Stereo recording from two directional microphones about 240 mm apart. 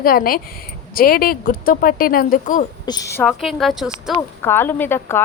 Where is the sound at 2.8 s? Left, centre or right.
Centre.